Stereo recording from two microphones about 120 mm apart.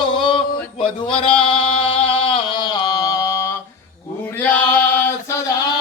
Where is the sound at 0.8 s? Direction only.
50° left (ahead or behind).